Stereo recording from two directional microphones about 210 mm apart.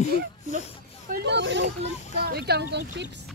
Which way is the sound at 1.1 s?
55° right (ahead or behind).